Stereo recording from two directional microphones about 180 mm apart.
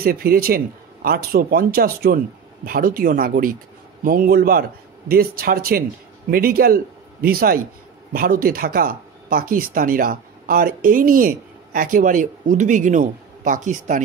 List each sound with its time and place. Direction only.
0.0 s a man's voice: 55° right (ahead or behind)